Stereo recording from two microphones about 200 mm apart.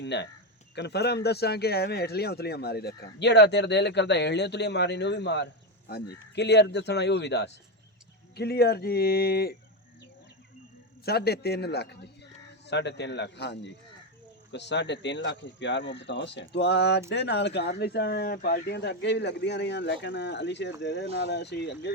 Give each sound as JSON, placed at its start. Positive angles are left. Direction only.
{"t": 0.0, "sound": "speech", "side_deg": 60}
{"t": 11.0, "sound": "speech", "side_deg": 55}